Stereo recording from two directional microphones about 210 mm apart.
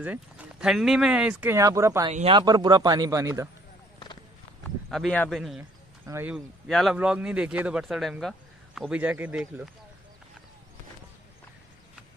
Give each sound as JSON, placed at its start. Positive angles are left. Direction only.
{"t": 0.0, "sound": "a man's voice", "side_deg": -5}
{"t": 4.9, "sound": "speech", "side_deg": 5}